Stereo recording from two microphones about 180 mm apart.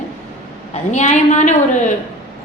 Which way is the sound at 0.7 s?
40° left (ahead or behind).